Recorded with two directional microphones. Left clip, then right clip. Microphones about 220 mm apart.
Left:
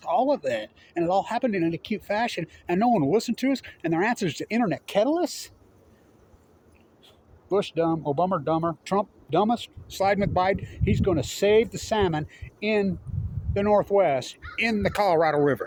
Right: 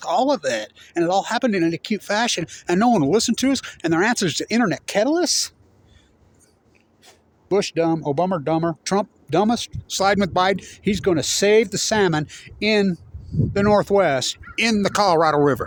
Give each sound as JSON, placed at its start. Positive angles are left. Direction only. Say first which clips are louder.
{"t": 0.0, "sound": "speech", "louder": "right 4 dB", "side_deg": -60}
{"t": 7.4, "sound": "speech", "louder": "right 4 dB", "side_deg": -50}